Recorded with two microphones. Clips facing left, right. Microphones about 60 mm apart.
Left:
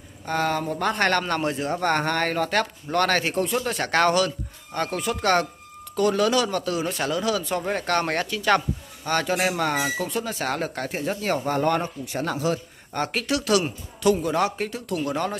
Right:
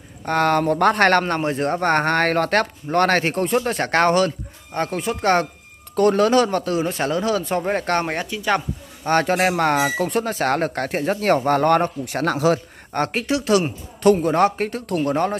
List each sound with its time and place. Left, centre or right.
0.2 s speech: right
1.3 s speech: right
1.6 s speech: right
2.9 s speech: right
5.9 s speech: right
8.1 s speech: centre
9.0 s speech: right
13.1 s speech: right
14.0 s speech: right